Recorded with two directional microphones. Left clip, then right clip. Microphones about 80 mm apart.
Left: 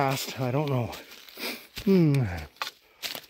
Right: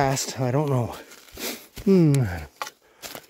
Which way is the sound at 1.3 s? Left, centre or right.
Right.